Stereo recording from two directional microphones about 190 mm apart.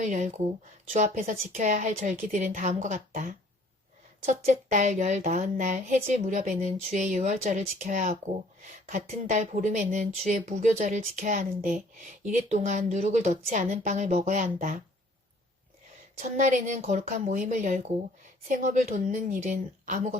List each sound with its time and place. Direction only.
0.0 s a woman's voice: 40° right (ahead or behind)
4.3 s a woman's voice: 40° right (ahead or behind)
16.1 s a woman's voice: 40° right (ahead or behind)